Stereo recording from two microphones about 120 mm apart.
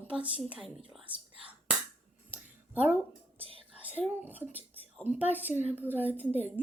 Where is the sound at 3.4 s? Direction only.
55° right (ahead or behind).